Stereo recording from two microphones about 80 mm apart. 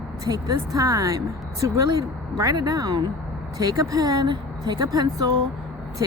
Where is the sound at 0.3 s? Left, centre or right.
Right.